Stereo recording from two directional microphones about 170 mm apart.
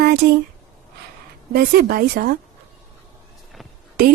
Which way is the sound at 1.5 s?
65° right (ahead or behind).